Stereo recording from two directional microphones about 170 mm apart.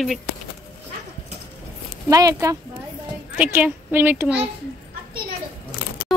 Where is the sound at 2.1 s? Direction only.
20° right (ahead or behind).